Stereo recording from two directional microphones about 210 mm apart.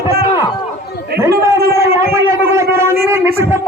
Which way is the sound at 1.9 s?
10° right (ahead or behind).